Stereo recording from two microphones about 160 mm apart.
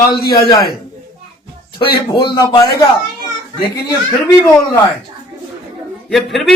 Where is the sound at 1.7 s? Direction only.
30° left (ahead or behind).